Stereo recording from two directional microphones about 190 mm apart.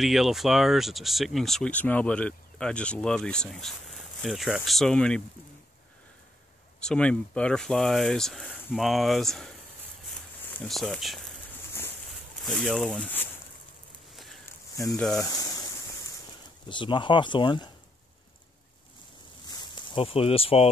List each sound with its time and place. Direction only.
0.0 s speech: centre (ahead or behind)
6.8 s speech: 5° left (ahead or behind)
10.6 s speech: 5° left (ahead or behind)
12.4 s speech: centre (ahead or behind)
14.1 s walk: centre (ahead or behind)
15.0 s speech: centre (ahead or behind)
16.6 s speech: 25° left (ahead or behind)
19.7 s speech: 25° left (ahead or behind)